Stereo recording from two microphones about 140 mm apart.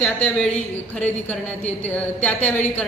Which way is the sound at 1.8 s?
10° left (ahead or behind).